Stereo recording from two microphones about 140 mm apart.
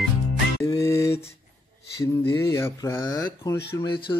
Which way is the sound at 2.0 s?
25° left (ahead or behind).